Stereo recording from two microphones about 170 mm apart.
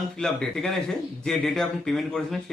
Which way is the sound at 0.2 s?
5° left (ahead or behind).